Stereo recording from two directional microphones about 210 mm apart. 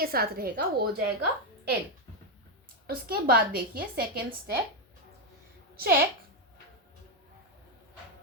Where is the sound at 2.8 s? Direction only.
45° right (ahead or behind).